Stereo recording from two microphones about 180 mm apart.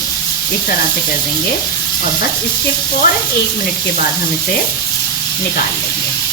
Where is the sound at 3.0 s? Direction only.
60° left (ahead or behind).